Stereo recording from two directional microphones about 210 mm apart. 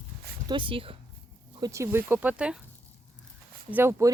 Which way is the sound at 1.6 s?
15° right (ahead or behind).